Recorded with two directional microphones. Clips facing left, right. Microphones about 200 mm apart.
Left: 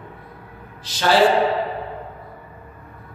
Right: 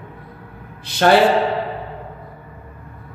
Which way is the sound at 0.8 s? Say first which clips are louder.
Right 5 dB; 60° right (ahead or behind).